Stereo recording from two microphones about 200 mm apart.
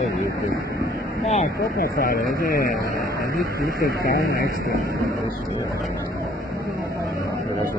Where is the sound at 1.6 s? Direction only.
50° left (ahead or behind).